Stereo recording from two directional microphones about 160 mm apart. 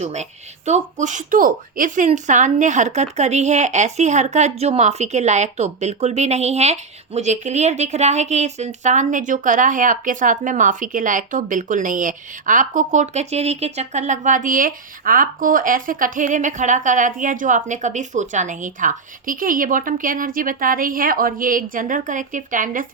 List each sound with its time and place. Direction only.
0.0 s speech: 45° right (ahead or behind)